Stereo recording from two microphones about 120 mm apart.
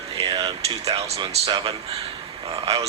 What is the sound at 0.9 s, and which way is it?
Speech, 55° right (ahead or behind).